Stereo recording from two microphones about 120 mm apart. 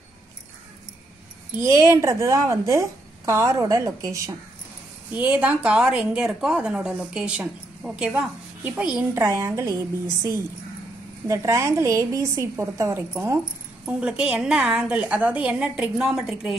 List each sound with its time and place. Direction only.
1.6 s a woman's voice: 25° right (ahead or behind)
5.1 s a woman's voice: 15° right (ahead or behind)
9.2 s a woman's voice: 25° right (ahead or behind)
11.2 s a woman's voice: 25° right (ahead or behind)
13.8 s a woman's voice: 10° right (ahead or behind)